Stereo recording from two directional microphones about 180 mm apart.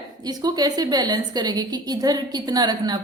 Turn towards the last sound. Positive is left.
turn(degrees=-20)  # may be behind; listen again after turning